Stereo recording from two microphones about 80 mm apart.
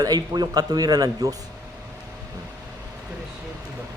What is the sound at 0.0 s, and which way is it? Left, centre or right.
A man's voice, right.